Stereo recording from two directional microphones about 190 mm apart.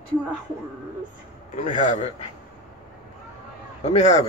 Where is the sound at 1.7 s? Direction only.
40° left (ahead or behind).